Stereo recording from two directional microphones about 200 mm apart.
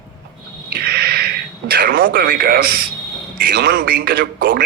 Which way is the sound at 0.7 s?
50° right (ahead or behind).